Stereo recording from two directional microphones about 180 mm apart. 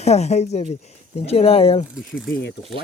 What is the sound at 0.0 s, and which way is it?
Speech, 35° left (ahead or behind).